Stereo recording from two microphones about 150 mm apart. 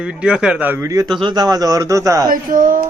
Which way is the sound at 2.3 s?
65° right (ahead or behind).